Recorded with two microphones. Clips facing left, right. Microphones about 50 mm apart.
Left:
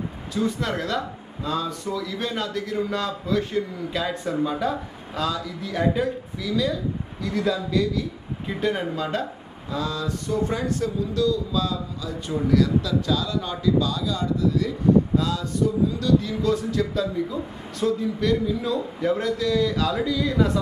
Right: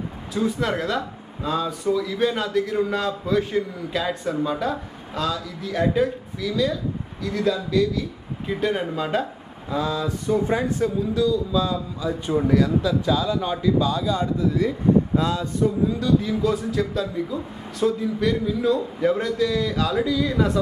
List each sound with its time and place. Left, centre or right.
0.3 s speech: centre
8.9 s speech: centre; by 15.4 s right
16.0 s speech: centre